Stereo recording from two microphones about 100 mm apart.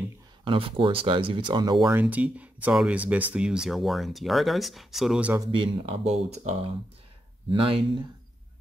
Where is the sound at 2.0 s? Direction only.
15° right (ahead or behind).